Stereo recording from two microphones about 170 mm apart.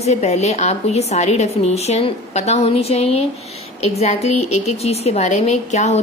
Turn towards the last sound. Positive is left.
turn(degrees=40)  # may be behind; listen again after turning